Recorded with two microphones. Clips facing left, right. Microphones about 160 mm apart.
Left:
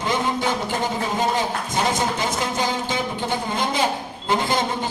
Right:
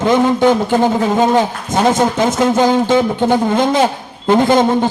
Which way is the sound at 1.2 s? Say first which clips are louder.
Right 9 dB; 50° right (ahead or behind).